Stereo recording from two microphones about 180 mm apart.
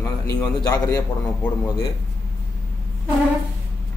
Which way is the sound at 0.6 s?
20° left (ahead or behind).